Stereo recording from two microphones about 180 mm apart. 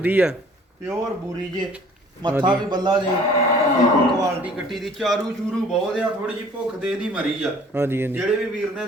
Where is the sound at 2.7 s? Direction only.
25° right (ahead or behind).